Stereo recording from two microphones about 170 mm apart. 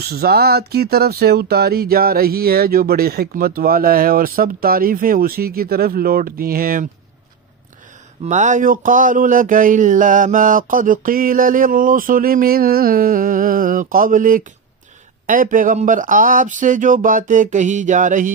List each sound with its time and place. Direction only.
0.0 s speech: 65° right (ahead or behind)
8.3 s speech: 45° right (ahead or behind)